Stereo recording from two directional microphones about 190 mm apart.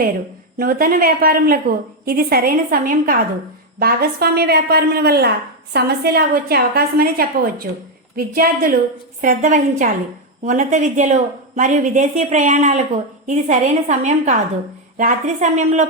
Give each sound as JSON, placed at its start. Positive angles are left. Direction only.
{"t": 0.5, "sound": "a woman's voice", "side_deg": -50}
{"t": 9.2, "sound": "a woman's voice", "side_deg": -40}